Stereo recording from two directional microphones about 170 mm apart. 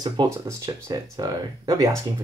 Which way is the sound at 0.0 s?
20° right (ahead or behind).